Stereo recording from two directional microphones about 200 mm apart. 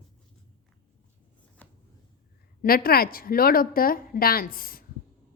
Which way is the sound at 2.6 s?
45° left (ahead or behind).